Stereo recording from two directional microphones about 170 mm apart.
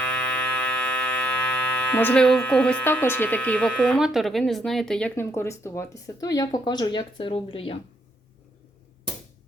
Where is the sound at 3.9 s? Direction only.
Centre (ahead or behind); by 7.8 s 35° left (ahead or behind).